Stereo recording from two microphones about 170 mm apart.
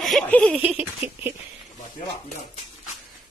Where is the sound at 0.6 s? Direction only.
10° right (ahead or behind).